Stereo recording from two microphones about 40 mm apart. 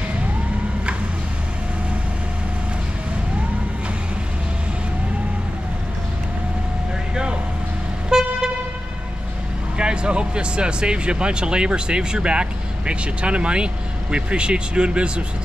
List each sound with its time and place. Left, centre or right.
8.1 s vehicle: centre
9.8 s speech: right